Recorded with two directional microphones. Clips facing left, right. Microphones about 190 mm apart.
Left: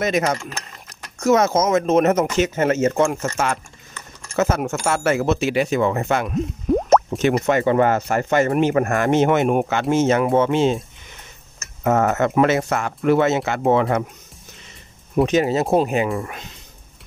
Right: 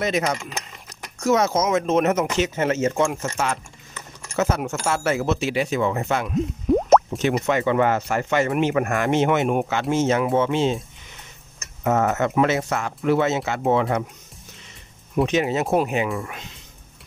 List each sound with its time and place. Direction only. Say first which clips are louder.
0.0 s speech: left 3 dB; 50° left (ahead or behind)
6.7 s drip: even; centre (ahead or behind)
7.1 s speech: left 3 dB; 55° left (ahead or behind)
11.8 s speech: left 3 dB; 55° left (ahead or behind)
15.2 s speech: left 3 dB; 40° left (ahead or behind)